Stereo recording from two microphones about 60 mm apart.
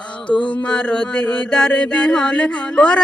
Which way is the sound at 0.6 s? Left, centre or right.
Centre.